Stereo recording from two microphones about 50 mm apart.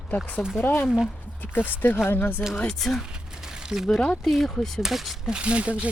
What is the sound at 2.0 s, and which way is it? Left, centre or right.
Speech, left.